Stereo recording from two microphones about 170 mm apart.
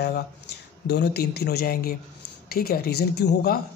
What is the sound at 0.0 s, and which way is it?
Speech, 75° left (ahead or behind).